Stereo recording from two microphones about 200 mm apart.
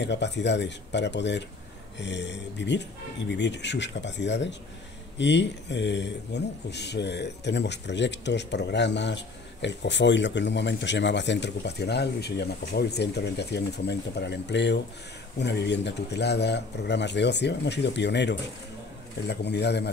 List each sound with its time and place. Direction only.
0.0 s speech: 60° left (ahead or behind)